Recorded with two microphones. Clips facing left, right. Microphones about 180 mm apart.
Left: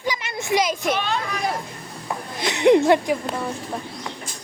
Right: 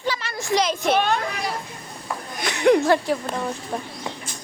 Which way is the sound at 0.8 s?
50° right (ahead or behind).